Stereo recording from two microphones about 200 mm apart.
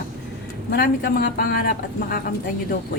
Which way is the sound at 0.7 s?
50° left (ahead or behind).